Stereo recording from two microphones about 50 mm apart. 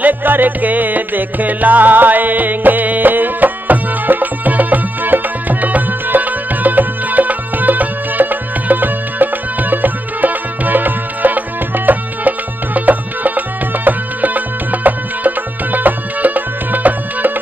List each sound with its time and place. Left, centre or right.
0.0 s music: right